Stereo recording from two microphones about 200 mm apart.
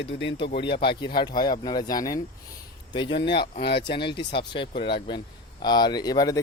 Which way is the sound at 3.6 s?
55° left (ahead or behind).